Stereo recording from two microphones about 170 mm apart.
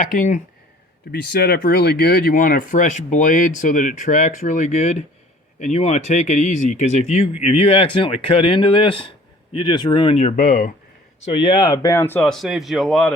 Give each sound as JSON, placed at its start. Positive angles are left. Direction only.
{"t": 0.0, "sound": "speech", "side_deg": 50}
{"t": 1.1, "sound": "speech", "side_deg": 70}
{"t": 11.3, "sound": "speech", "side_deg": 25}